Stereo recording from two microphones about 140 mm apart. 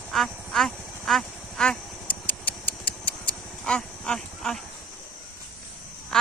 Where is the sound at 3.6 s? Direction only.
5° left (ahead or behind).